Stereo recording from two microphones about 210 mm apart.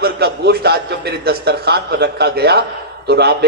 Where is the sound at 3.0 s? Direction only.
50° right (ahead or behind).